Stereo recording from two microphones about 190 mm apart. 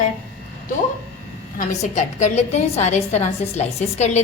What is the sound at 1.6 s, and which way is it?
A woman's voice, 40° left (ahead or behind).